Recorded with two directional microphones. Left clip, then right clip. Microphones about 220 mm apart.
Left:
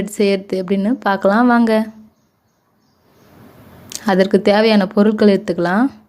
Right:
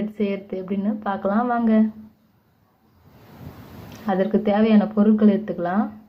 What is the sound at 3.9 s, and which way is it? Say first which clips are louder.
A woman's voice: left 8 dB; 55° left (ahead or behind).